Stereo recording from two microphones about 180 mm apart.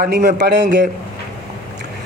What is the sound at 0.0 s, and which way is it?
Speech, 55° right (ahead or behind).